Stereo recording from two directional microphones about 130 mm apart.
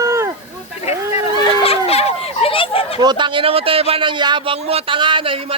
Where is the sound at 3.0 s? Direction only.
35° right (ahead or behind).